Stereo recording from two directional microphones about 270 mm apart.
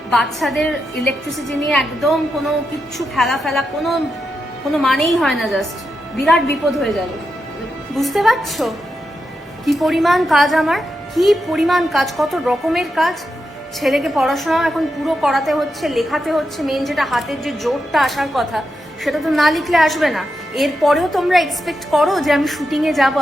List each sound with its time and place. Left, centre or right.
0.1 s a woman's voice: centre
6.7 s a woman's voice: centre